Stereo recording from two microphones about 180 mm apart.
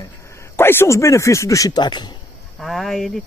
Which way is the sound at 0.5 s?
10° left (ahead or behind).